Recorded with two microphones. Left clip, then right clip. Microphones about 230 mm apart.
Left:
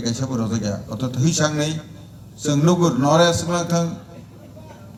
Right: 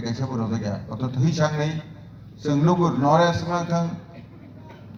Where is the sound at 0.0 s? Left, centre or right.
Left.